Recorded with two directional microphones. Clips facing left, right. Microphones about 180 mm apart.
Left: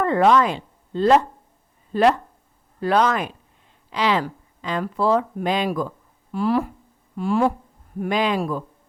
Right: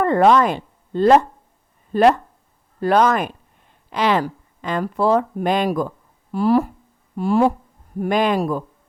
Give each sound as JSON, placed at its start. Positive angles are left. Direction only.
{"t": 0.0, "sound": "a woman's voice", "side_deg": -45}
{"t": 6.3, "sound": "speech", "side_deg": -40}